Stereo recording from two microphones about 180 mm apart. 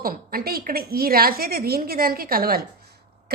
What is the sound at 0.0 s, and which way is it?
A woman's voice, 55° right (ahead or behind).